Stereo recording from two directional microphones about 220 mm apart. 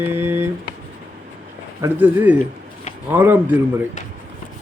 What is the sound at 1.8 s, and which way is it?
A man's voice, 10° right (ahead or behind).